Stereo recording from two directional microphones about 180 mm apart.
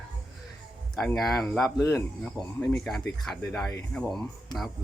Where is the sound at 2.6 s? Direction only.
Centre (ahead or behind).